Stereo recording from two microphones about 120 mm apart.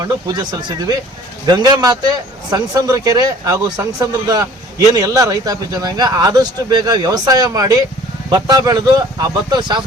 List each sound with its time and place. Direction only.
0.0 s a man's voice: 35° right (ahead or behind)